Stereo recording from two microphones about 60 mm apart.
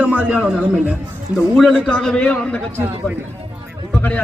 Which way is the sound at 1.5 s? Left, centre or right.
Centre.